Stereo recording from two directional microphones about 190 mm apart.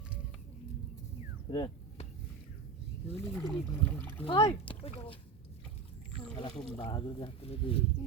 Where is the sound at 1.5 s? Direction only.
25° left (ahead or behind).